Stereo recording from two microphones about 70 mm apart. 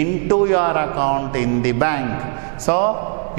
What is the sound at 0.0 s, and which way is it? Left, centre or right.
A man's voice, centre.